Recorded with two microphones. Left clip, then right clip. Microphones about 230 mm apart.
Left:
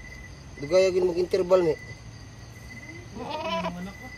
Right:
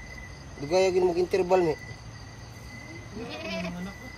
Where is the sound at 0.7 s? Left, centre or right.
Centre.